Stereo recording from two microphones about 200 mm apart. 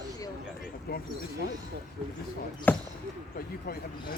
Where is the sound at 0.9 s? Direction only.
50° left (ahead or behind).